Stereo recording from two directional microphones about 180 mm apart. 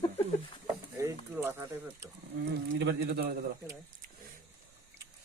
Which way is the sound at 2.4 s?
65° right (ahead or behind).